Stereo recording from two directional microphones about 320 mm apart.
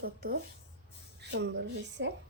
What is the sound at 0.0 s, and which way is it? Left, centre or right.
A woman's voice, right.